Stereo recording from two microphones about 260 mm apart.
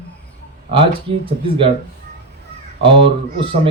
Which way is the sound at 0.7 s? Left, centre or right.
Centre.